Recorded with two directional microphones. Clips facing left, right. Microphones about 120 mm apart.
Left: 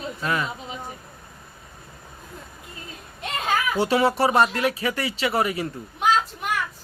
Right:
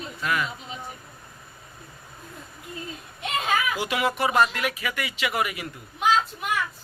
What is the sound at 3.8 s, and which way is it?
Speech, 30° left (ahead or behind).